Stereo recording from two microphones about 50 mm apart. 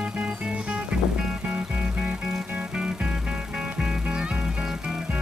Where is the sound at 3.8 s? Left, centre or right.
Centre.